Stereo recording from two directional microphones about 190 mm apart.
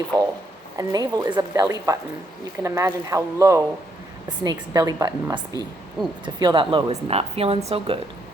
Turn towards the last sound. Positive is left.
turn(degrees=-30)  # may be behind; listen again after turning